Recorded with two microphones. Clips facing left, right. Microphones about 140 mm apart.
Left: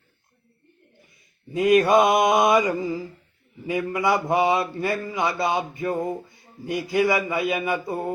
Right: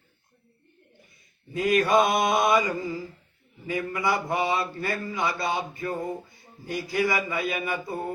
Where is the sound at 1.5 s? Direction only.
25° left (ahead or behind).